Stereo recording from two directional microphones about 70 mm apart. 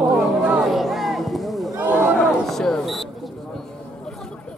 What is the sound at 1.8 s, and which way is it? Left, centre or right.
Speech, right.